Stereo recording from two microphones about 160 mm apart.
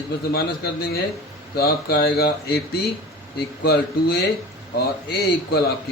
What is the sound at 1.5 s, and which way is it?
Mantra, 75° left (ahead or behind).